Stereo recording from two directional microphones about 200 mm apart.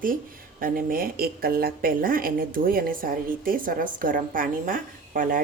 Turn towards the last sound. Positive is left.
turn(degrees=-40)  # may be behind; listen again after turning